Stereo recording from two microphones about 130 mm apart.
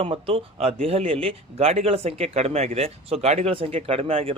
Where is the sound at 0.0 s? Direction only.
45° right (ahead or behind).